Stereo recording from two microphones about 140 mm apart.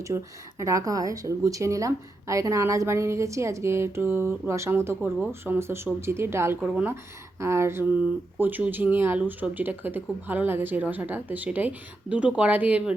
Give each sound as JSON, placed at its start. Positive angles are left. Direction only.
{"t": 0.1, "sound": "a woman's voice", "side_deg": -25}
{"t": 6.9, "sound": "a woman's voice", "side_deg": -20}